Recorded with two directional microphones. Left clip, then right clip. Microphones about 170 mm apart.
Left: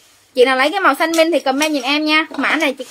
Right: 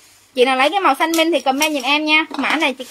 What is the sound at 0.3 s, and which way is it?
A woman's voice, 30° left (ahead or behind).